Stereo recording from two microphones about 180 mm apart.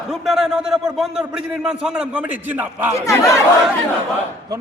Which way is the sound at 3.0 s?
15° left (ahead or behind).